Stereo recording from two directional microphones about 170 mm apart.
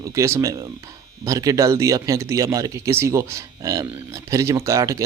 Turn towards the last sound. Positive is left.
turn(degrees=-20)  # may be behind; listen again after turning